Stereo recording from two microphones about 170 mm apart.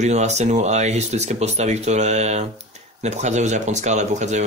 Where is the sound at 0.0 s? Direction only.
40° right (ahead or behind).